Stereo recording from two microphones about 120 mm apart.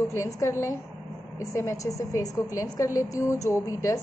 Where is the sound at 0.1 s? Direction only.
25° left (ahead or behind).